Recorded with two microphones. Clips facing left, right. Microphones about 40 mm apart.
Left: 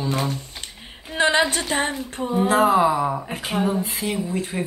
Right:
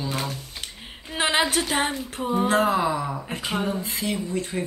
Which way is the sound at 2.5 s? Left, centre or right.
Centre.